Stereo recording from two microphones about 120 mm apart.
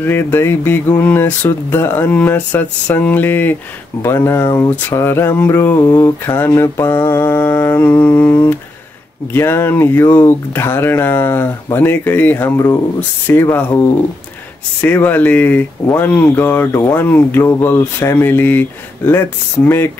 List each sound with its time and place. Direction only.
0.0 s speech: 20° left (ahead or behind)
4.0 s a sound: 20° left (ahead or behind)
13.3 s speech: 20° left (ahead or behind)